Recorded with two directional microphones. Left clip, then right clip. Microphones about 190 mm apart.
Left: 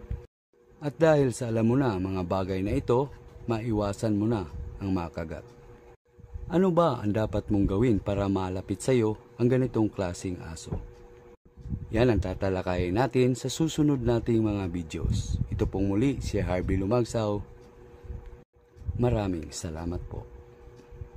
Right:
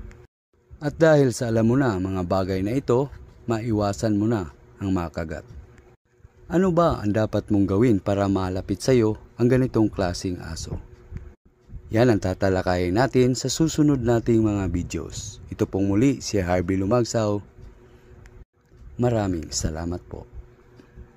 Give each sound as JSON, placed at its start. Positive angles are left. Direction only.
{"t": 0.7, "sound": "speech", "side_deg": -25}
{"t": 6.5, "sound": "speech", "side_deg": -20}
{"t": 11.9, "sound": "speech", "side_deg": -25}
{"t": 18.9, "sound": "speech", "side_deg": -25}